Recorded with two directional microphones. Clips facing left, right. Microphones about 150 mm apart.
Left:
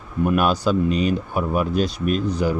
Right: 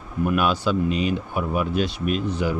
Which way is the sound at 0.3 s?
40° left (ahead or behind).